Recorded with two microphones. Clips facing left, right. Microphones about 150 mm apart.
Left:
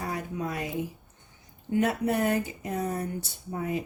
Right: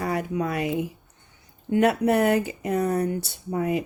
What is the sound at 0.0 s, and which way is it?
A woman's voice, 70° right (ahead or behind).